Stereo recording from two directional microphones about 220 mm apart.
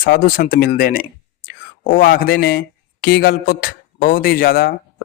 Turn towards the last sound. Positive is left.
turn(degrees=45)  # may be behind; listen again after turning